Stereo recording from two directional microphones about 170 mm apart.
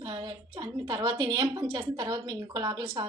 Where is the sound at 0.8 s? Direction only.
25° right (ahead or behind).